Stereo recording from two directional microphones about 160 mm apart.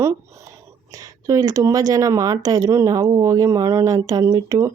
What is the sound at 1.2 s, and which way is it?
Speech, 20° right (ahead or behind).